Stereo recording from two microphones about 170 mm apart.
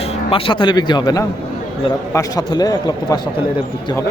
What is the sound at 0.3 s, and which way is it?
A man's voice, 30° left (ahead or behind).